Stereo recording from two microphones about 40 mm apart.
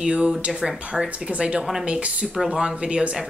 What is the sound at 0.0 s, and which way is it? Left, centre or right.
Speech, centre.